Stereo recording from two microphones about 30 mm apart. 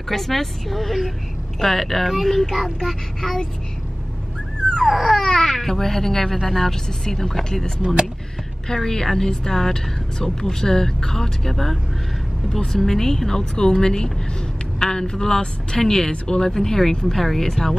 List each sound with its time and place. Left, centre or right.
0.1 s speech: centre
4.8 s speech: centre
5.2 s speech: left
5.5 s speech: centre
6.7 s speech: centre
7.8 s speech: right
8.7 s speech: centre
11.5 s speech: centre